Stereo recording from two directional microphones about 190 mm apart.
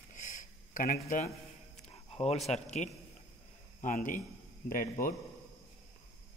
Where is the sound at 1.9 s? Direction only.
35° left (ahead or behind).